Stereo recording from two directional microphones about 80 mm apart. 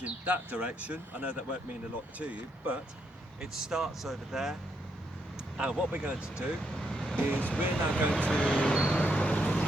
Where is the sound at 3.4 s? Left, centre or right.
Centre.